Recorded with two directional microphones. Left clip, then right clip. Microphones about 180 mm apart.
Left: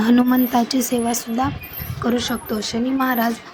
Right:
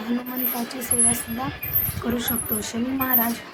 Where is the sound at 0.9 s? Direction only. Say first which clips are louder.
Left 6 dB; 50° left (ahead or behind).